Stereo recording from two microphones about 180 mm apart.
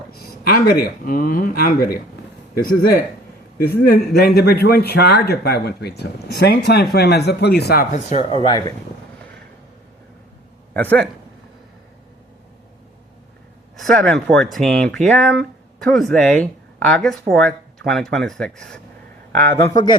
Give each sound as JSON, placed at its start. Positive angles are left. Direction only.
{"t": 0.2, "sound": "speech", "side_deg": 60}
{"t": 3.6, "sound": "speech", "side_deg": 60}
{"t": 8.3, "sound": "a man's voice", "side_deg": 30}
{"t": 10.8, "sound": "a man's voice", "side_deg": 10}
{"t": 13.9, "sound": "speech", "side_deg": 5}
{"t": 19.5, "sound": "a man's voice", "side_deg": 20}